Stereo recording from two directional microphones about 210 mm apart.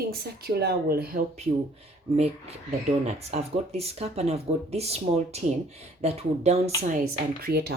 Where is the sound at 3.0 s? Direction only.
30° right (ahead or behind).